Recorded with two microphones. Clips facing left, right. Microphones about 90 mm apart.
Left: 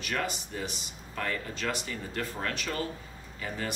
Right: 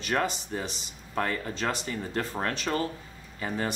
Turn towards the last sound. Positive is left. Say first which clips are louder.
# right 4 dB
turn(degrees=-35)  # may be behind; listen again after turning